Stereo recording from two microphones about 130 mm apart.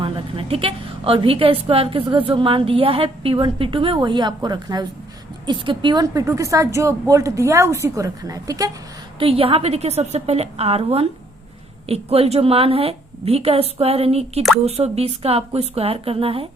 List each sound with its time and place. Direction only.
0.0 s a woman's voice: 45° right (ahead or behind); by 8.7 s 30° right (ahead or behind)
9.1 s a woman's voice: 45° right (ahead or behind)